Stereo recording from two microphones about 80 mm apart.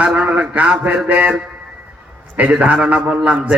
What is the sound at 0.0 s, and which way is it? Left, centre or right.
Mantra, centre.